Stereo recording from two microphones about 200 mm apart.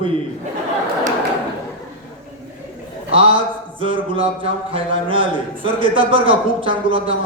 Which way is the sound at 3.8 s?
25° right (ahead or behind).